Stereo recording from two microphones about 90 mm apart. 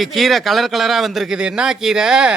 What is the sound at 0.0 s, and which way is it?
A man's voice, centre (ahead or behind).